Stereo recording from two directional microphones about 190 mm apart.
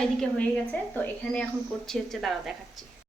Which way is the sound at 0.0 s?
5° left (ahead or behind).